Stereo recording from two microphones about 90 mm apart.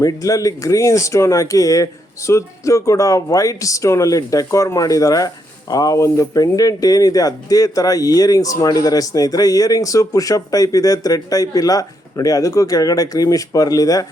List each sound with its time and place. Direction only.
0.0 s speech: 40° left (ahead or behind)